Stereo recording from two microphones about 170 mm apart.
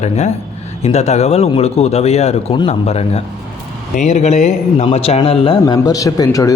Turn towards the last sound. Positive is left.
turn(degrees=20)  # may be behind; listen again after turning